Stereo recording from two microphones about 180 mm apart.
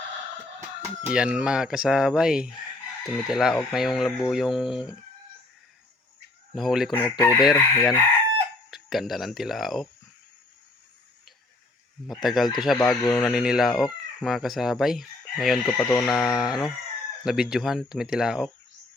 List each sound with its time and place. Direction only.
0.8 s speech: 5° right (ahead or behind)
6.5 s speech: centre (ahead or behind)
7.2 s chicken: 20° left (ahead or behind)
8.7 s speech: centre (ahead or behind)
12.0 s speech: centre (ahead or behind)